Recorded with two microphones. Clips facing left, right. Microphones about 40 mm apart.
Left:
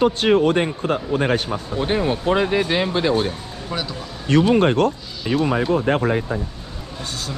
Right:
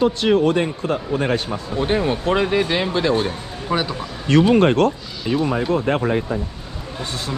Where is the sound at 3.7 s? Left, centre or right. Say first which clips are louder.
Right 6 dB; right.